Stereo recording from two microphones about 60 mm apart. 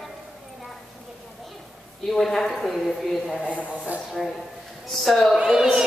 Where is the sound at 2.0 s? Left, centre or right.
Centre.